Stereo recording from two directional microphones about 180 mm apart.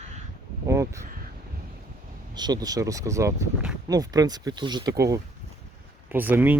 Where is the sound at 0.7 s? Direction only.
15° right (ahead or behind).